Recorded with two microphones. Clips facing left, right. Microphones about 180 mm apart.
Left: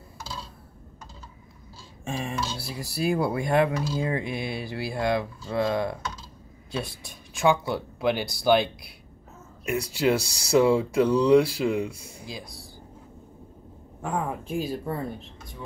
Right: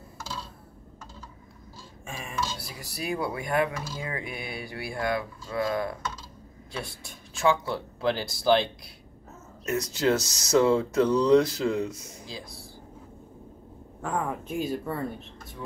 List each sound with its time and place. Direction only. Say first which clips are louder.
2.0 s speech: left 3 dB; 35° left (ahead or behind); by 12.6 s 15° left (ahead or behind)
14.7 s speech: even; 15° left (ahead or behind)